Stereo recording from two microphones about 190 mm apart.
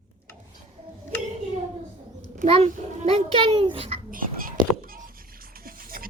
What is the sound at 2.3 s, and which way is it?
A child's voice, 35° right (ahead or behind).